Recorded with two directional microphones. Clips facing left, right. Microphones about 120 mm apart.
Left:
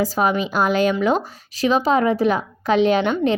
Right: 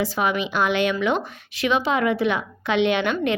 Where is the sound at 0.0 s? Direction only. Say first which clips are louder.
Left 3 dB; 40° left (ahead or behind).